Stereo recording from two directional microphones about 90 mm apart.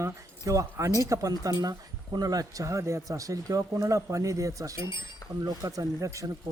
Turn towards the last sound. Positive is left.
turn(degrees=-35)  # may be behind; listen again after turning